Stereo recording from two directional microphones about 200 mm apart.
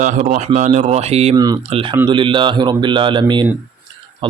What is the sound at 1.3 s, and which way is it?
Speech, 20° right (ahead or behind).